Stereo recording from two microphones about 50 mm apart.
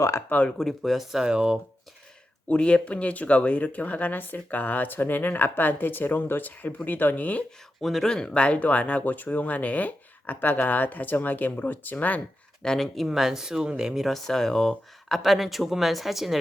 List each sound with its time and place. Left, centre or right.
0.3 s speech: left
0.6 s speech: centre
1.2 s speech: centre
2.5 s speech: left
7.8 s speech: centre
8.1 s speech: centre
12.6 s speech: centre
13.1 s speech: centre
14.1 s speech: centre